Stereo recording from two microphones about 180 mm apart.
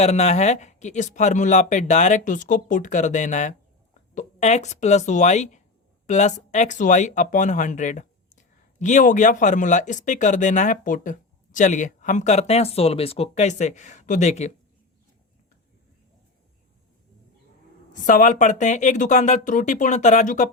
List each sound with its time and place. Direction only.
0.0 s speech: 40° left (ahead or behind)
17.9 s speech: 45° left (ahead or behind)